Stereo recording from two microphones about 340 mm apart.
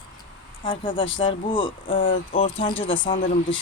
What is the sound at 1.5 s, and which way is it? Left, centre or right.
Speech, centre.